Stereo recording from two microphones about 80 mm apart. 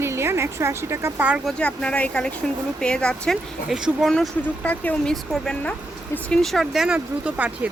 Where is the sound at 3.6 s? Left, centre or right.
Centre.